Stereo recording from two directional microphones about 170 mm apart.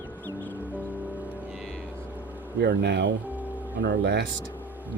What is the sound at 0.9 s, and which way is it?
Music, 10° right (ahead or behind).